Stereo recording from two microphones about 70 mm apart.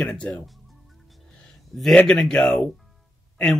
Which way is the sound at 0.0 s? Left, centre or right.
Centre.